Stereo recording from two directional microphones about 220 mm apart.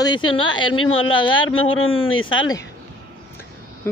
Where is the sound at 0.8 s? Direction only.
65° left (ahead or behind).